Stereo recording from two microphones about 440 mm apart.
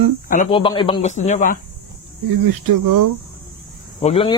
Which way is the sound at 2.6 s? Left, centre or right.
Right.